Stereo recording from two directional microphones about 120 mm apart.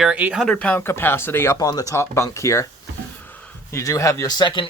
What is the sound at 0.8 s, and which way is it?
Speech, 20° left (ahead or behind).